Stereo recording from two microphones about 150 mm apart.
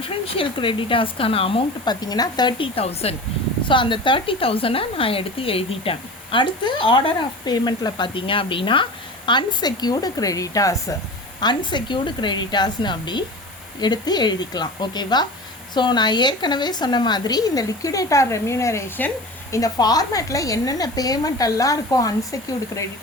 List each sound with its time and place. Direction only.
0.0 s a woman's voice: 35° left (ahead or behind); by 22.9 s 20° left (ahead or behind)